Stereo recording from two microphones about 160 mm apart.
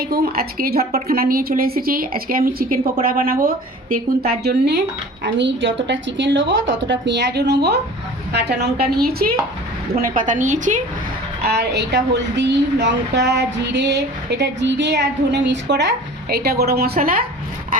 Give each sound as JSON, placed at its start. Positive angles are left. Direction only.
{"t": 0.0, "sound": "a woman's voice", "side_deg": -70}
{"t": 4.3, "sound": "a woman's voice", "side_deg": -90}
{"t": 9.9, "sound": "a woman's voice", "side_deg": -60}
{"t": 11.4, "sound": "speech", "side_deg": -90}